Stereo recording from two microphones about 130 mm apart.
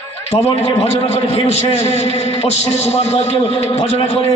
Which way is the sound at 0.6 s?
55° left (ahead or behind).